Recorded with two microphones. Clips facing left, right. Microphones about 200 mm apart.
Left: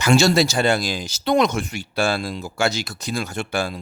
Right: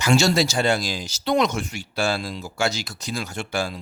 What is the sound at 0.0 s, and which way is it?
Speech, 60° left (ahead or behind).